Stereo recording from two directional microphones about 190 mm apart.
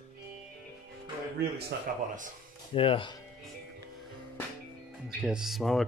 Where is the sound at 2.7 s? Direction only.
30° left (ahead or behind).